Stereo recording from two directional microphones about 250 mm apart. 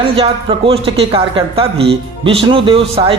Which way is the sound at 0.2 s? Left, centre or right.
Right.